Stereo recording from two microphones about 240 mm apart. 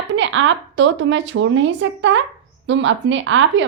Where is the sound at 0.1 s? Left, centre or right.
Right.